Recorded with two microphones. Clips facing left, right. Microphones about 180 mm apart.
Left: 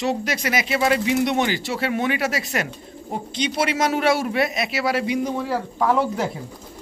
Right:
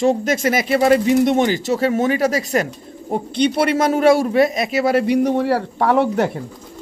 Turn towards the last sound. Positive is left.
turn(degrees=-65)  # may be behind; listen again after turning